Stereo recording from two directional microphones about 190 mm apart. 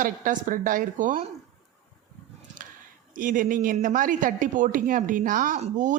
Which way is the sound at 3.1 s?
45° right (ahead or behind).